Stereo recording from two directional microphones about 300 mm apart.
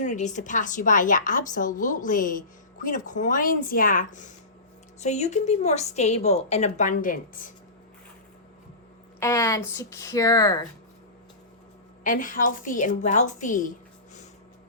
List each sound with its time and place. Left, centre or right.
0.0 s a woman's voice: left
9.2 s speech: centre
12.0 s a woman's voice: left